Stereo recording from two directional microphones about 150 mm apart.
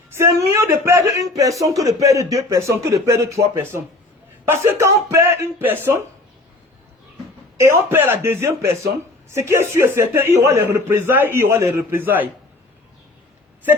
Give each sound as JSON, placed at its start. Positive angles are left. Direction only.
{"t": 0.1, "sound": "a man's voice", "side_deg": -20}
{"t": 7.6, "sound": "a man's voice", "side_deg": -15}